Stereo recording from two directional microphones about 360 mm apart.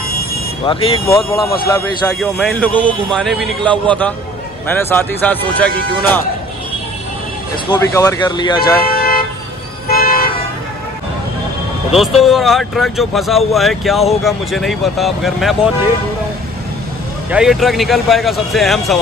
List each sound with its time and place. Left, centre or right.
0.7 s speech: centre
7.7 s speech: centre
8.9 s toot: left
9.8 s car: left
11.9 s speech: centre
17.3 s speech: centre